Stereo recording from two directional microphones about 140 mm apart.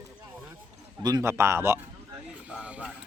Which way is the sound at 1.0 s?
25° right (ahead or behind).